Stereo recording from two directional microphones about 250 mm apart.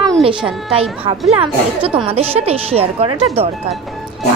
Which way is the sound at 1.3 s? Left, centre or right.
Right.